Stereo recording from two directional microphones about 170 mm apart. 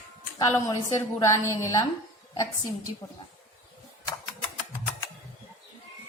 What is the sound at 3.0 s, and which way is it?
Child singing, 25° left (ahead or behind).